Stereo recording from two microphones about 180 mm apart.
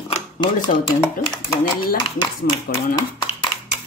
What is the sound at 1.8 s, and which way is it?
Speech, 25° left (ahead or behind).